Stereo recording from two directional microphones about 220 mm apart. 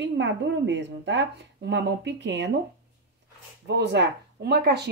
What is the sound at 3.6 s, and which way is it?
Speech, 50° right (ahead or behind).